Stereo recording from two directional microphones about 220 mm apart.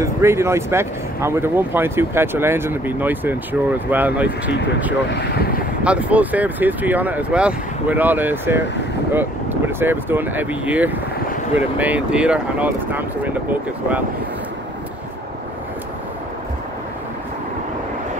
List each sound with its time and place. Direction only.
0.0 s speech: 10° right (ahead or behind)
5.1 s speech: 50° left (ahead or behind)
5.9 s speech: 5° right (ahead or behind)